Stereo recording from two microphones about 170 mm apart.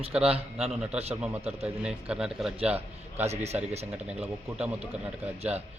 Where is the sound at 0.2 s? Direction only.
35° right (ahead or behind).